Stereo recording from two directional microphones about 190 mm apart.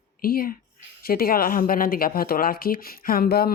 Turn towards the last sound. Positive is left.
turn(degrees=55)  # may be behind; listen again after turning